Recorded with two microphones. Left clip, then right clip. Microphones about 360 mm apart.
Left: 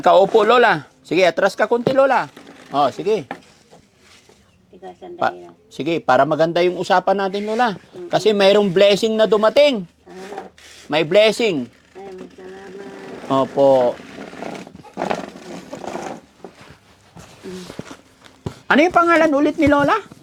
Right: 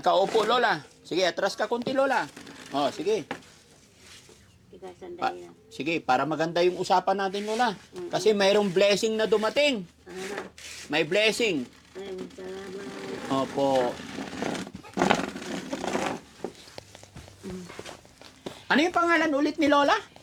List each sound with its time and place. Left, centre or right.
0.0 s speech: left
5.2 s speech: left
10.9 s speech: left
13.3 s speech: left
14.9 s a sound: right
18.7 s speech: left; by 20.1 s centre